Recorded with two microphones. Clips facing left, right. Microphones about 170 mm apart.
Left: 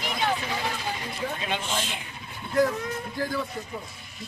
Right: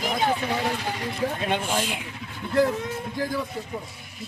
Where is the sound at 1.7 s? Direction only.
10° right (ahead or behind).